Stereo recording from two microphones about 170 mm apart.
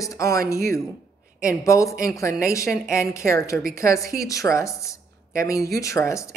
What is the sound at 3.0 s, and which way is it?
A woman's voice, 15° left (ahead or behind).